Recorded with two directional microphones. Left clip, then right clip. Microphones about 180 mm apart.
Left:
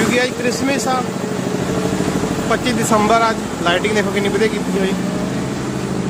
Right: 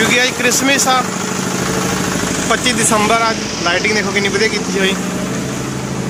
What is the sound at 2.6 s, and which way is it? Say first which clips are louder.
Speech: right 1 dB; 5° left (ahead or behind).